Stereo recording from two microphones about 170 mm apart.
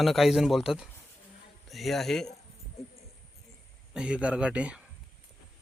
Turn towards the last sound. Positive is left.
turn(degrees=-5)  # may be behind; listen again after turning